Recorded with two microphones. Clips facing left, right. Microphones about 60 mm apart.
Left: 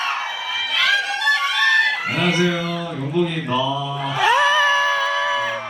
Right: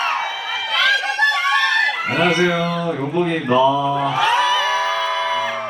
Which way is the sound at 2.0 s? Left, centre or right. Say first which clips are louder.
Right 3 dB; right.